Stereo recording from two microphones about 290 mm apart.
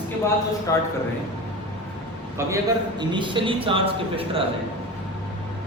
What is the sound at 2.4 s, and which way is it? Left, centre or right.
A man's voice, centre.